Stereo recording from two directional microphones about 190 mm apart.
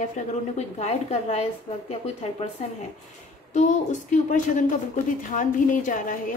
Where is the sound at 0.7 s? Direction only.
35° left (ahead or behind).